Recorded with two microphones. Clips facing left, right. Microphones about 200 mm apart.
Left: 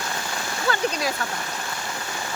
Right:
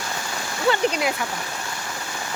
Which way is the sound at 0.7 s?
25° right (ahead or behind).